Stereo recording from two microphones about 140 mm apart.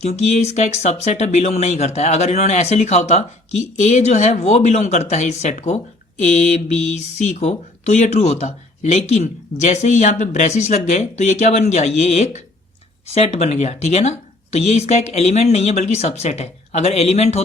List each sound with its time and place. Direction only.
0.0 s speech: 55° left (ahead or behind)